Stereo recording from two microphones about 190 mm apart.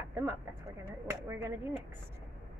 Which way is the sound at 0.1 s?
15° right (ahead or behind).